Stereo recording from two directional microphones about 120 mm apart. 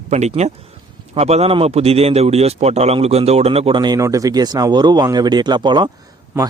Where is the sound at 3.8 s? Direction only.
30° right (ahead or behind).